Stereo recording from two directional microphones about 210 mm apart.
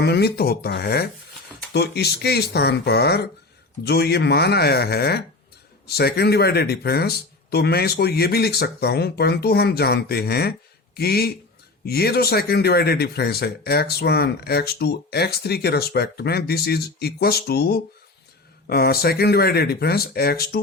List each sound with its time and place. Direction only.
0.0 s speech: 50° left (ahead or behind)